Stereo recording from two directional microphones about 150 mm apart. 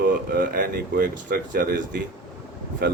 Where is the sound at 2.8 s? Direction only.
90° right.